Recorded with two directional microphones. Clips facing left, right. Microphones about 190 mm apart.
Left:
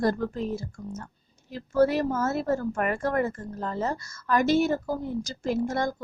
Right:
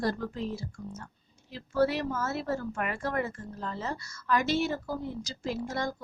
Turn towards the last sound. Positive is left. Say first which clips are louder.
# left 6 dB
turn(degrees=50)  # may be behind; listen again after turning